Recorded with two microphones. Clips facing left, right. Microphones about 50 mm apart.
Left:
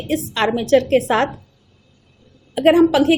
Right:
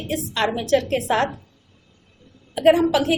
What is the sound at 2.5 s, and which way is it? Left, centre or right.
Speech, left.